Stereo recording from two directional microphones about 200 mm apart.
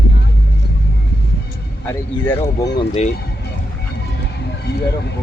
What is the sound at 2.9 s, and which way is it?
Speech, 35° left (ahead or behind).